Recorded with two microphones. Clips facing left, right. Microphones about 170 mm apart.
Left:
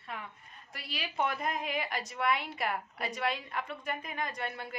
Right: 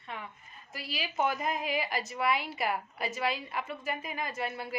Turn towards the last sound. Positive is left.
turn(degrees=-5)  # may be behind; listen again after turning